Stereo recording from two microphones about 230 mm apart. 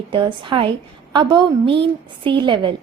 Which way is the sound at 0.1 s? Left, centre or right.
Right.